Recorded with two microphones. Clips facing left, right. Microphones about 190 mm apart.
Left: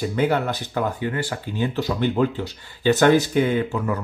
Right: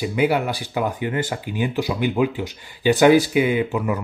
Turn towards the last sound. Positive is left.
turn(degrees=-15)  # may be behind; listen again after turning